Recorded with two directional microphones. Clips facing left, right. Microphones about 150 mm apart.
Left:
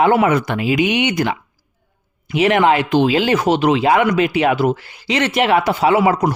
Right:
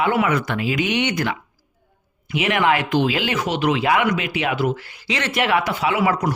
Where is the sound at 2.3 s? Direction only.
35° left (ahead or behind).